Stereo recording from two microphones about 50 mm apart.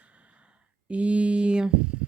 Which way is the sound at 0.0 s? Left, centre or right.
Right.